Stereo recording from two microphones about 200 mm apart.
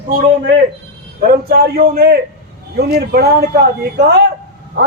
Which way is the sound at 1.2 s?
50° right (ahead or behind).